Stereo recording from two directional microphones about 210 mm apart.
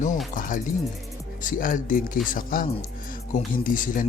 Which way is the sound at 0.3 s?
40° left (ahead or behind).